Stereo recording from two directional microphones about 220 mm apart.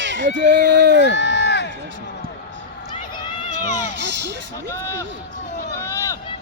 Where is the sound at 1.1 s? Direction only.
50° left (ahead or behind).